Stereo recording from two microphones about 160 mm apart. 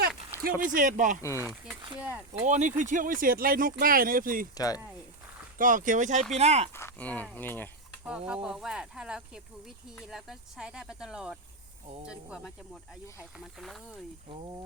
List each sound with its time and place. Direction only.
0.6 s speech: 55° right (ahead or behind)
1.2 s speech: 20° left (ahead or behind)
2.0 s speech: 10° right (ahead or behind)
2.4 s speech: 50° right (ahead or behind)
4.5 s speech: 25° left (ahead or behind)
5.5 s speech: 55° right (ahead or behind)
6.7 s speech: 10° left (ahead or behind)
8.3 s speech: 5° right (ahead or behind)
13.4 s speech: centre (ahead or behind)
14.3 s speech: 30° right (ahead or behind)